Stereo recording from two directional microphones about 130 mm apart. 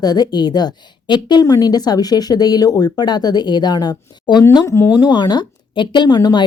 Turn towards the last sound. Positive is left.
turn(degrees=30)  # may be behind; listen again after turning